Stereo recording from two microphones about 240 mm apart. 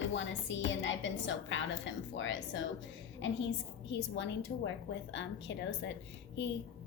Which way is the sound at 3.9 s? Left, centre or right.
Left.